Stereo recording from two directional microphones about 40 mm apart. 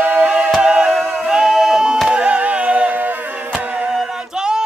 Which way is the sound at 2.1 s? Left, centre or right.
Right.